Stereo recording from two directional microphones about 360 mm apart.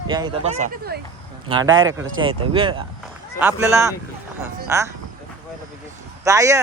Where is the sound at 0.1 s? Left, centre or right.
Centre.